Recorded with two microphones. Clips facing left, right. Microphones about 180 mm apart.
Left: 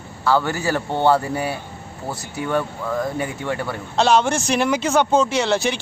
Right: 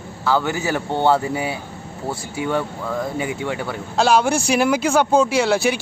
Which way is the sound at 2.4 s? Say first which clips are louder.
Even; 5° right (ahead or behind).